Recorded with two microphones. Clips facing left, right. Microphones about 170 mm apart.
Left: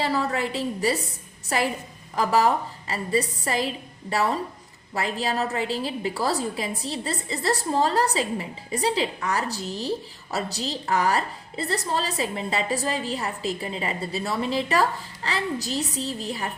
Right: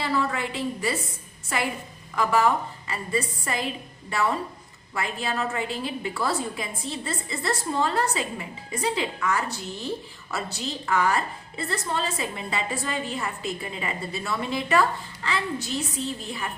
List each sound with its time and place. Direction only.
0.0 s a woman's voice: 40° left (ahead or behind)